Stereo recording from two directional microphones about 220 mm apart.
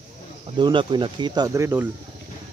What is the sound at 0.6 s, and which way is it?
Speech, 20° right (ahead or behind).